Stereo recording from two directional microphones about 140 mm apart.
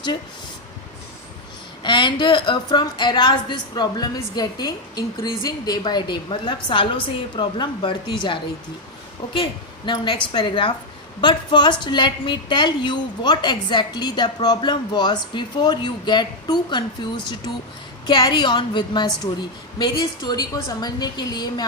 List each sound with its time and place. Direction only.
1.8 s a woman's voice: 35° left (ahead or behind)